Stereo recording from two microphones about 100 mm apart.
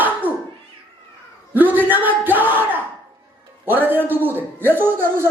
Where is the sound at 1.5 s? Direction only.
20° right (ahead or behind).